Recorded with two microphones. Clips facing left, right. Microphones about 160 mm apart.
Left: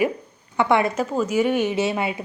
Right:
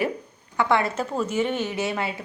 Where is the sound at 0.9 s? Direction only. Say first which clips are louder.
Left 4 dB; 10° left (ahead or behind).